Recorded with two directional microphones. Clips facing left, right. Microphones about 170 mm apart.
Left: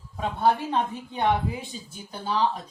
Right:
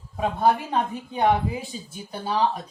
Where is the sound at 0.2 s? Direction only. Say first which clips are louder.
Right 2 dB; 10° right (ahead or behind).